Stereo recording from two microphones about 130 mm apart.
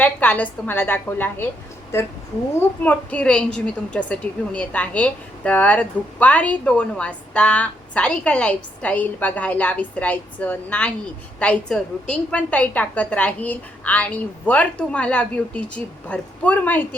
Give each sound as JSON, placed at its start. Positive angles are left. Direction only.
{"t": 0.0, "sound": "a woman's voice", "side_deg": 10}